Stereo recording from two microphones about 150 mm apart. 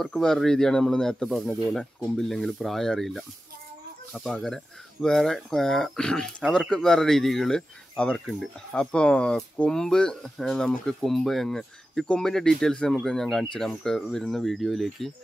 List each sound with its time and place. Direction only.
0.0 s speech: centre (ahead or behind)